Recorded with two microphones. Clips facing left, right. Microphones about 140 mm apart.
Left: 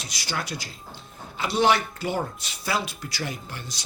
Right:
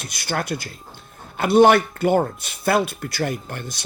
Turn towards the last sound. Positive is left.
turn(degrees=-55)  # may be behind; listen again after turning